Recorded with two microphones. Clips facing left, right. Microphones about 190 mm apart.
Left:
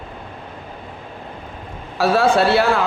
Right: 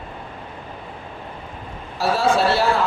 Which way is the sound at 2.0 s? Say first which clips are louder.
Left 3 dB; 60° left (ahead or behind).